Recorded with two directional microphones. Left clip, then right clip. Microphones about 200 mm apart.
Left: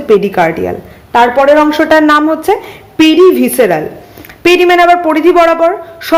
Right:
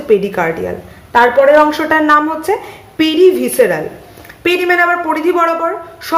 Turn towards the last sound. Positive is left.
turn(degrees=45)  # may be behind; listen again after turning